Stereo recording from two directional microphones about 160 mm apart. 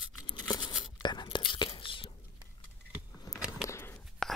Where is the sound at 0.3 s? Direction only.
30° left (ahead or behind).